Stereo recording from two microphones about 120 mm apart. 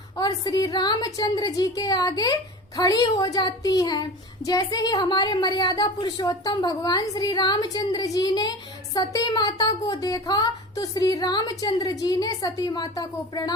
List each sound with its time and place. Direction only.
0.2 s speech: 30° left (ahead or behind)